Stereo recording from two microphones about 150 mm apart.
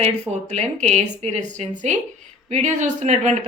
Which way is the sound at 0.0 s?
45° right (ahead or behind).